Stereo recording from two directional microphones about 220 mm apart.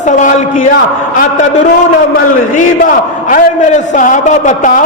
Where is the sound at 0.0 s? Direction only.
35° left (ahead or behind).